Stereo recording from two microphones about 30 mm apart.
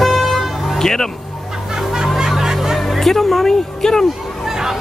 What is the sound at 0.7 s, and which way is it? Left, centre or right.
Speech, centre.